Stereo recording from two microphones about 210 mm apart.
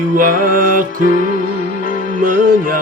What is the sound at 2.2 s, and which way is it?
Music, 40° right (ahead or behind).